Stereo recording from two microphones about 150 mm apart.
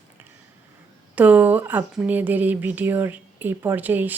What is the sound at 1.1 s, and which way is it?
A woman's voice, 10° right (ahead or behind).